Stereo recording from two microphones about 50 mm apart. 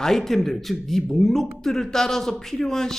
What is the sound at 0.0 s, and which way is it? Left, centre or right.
Speech, centre.